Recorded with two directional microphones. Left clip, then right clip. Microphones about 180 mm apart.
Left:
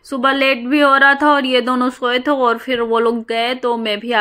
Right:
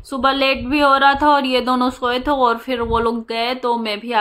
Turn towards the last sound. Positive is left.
turn(degrees=20)  # may be behind; listen again after turning